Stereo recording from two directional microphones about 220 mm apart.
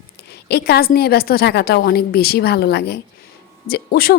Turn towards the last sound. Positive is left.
turn(degrees=45)  # may be behind; listen again after turning